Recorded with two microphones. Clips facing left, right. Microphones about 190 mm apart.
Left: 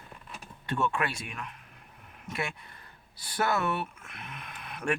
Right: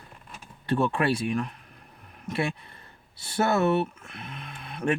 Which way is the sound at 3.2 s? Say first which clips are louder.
Right 5 dB; 25° right (ahead or behind).